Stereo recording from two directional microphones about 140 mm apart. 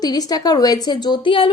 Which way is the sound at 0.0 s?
30° left (ahead or behind).